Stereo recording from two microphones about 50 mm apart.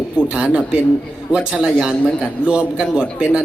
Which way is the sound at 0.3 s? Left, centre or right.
Centre.